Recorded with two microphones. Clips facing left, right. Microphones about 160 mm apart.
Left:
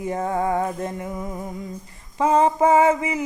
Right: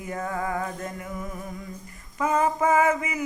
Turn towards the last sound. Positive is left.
turn(degrees=30)  # may be behind; listen again after turning